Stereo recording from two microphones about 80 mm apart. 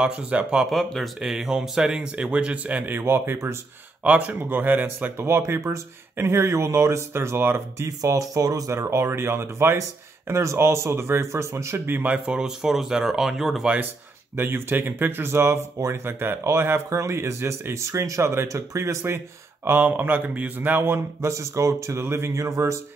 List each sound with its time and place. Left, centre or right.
0.0 s speech: centre
0.7 s speech: centre; by 3.5 s right
4.0 s speech: centre
5.2 s speech: right
8.0 s speech: right; by 13.7 s centre
14.3 s speech: right
19.8 s speech: right